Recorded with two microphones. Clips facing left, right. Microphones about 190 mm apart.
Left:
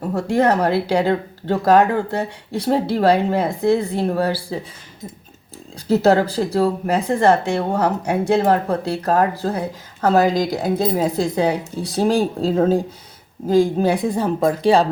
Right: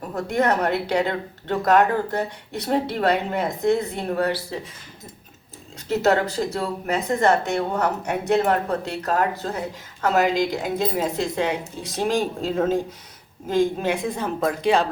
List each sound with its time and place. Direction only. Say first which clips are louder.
0.2 s speech: left 4 dB; 30° left (ahead or behind)
5.9 s speech: left 5 dB; 35° left (ahead or behind)